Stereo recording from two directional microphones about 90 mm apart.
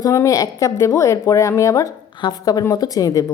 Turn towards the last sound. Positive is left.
turn(degrees=40)  # may be behind; listen again after turning